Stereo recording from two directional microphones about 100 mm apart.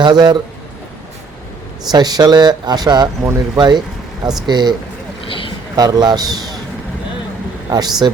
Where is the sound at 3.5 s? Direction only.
45° right (ahead or behind).